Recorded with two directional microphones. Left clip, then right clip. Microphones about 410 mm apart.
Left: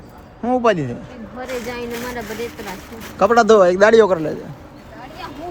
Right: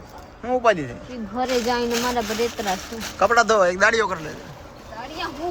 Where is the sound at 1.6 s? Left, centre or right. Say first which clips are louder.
Right 4 dB; centre.